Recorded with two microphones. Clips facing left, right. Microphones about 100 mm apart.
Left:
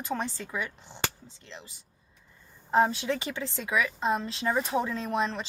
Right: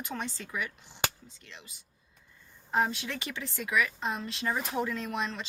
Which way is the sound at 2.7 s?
30° left (ahead or behind).